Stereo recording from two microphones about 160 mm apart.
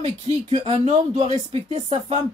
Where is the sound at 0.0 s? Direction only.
40° right (ahead or behind).